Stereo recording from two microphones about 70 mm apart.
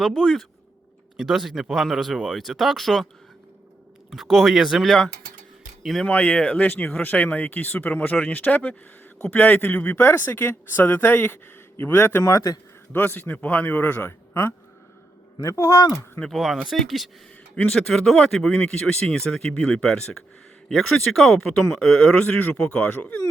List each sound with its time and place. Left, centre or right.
0.0 s speech: centre
4.1 s speech: centre
6.1 s a man's voice: centre; by 12.2 s left
12.2 s a man's voice: left
12.9 s speech: left
15.4 s a man's voice: left
16.3 s speech: centre
17.5 s speech: centre